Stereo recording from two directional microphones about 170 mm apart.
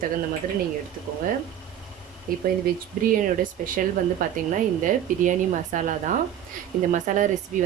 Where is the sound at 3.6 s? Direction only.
50° right (ahead or behind).